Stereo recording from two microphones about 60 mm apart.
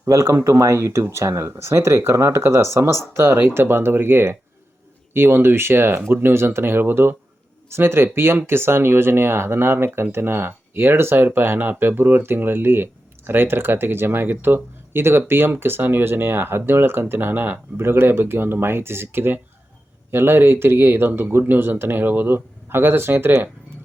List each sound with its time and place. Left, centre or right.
0.0 s speech: right